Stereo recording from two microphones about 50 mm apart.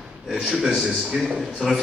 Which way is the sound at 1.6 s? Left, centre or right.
Centre.